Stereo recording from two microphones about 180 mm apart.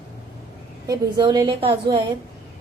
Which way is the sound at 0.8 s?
20° right (ahead or behind).